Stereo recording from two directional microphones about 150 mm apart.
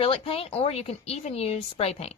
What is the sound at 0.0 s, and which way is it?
Speech, 40° left (ahead or behind).